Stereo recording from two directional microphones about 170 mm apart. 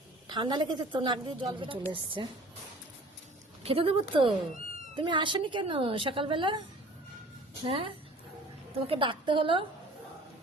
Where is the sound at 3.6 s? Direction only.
35° right (ahead or behind).